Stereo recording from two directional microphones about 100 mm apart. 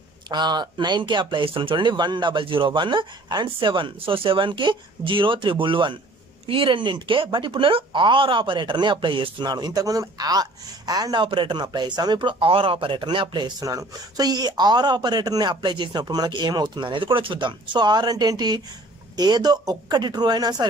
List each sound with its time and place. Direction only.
0.3 s speech: 45° right (ahead or behind)
11.2 s speech: 55° right (ahead or behind)